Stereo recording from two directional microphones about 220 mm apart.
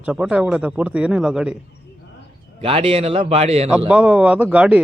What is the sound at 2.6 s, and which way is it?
A man's voice, 25° right (ahead or behind).